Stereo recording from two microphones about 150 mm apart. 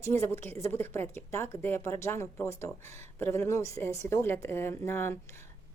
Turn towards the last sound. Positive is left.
turn(degrees=15)  # may be behind; listen again after turning